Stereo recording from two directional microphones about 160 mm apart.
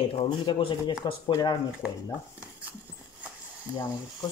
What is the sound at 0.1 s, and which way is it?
Speech, 30° left (ahead or behind).